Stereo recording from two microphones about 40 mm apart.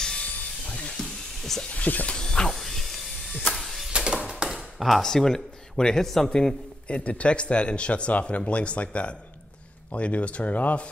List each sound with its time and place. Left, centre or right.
0.7 s music: left
0.9 s a sound: centre
1.7 s speech: left
2.1 s speech: centre
2.6 s electric shaver: centre
3.4 s music: centre
3.9 s a sound: right
4.6 s a sound: centre
5.0 s a man's voice: centre
6.9 s speech: left